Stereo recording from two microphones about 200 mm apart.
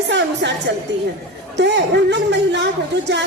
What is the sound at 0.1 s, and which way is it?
Speech, 60° right (ahead or behind).